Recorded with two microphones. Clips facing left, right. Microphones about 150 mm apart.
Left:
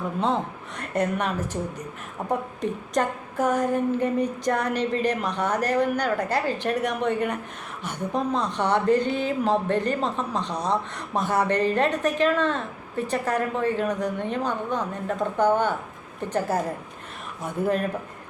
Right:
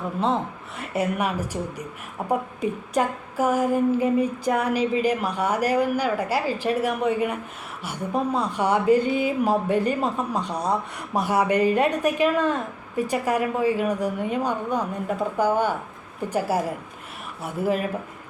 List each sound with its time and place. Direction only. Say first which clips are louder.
0.8 s a woman's voice: right 1 dB; 5° right (ahead or behind)
2.6 s a woman's voice: right 1 dB; 10° right (ahead or behind)